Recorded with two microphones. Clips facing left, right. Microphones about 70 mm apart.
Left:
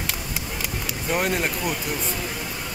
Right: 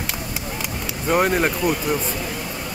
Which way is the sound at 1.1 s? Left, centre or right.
Right.